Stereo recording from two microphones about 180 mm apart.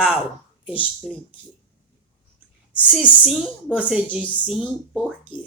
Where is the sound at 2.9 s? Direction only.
5° right (ahead or behind).